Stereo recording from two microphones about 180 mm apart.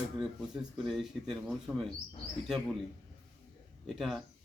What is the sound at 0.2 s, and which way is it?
Speech, centre (ahead or behind).